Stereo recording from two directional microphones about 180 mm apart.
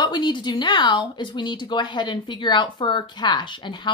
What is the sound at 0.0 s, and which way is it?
Speech, 25° left (ahead or behind).